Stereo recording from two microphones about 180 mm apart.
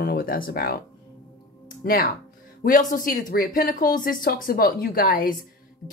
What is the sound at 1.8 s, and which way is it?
Speech, 55° left (ahead or behind).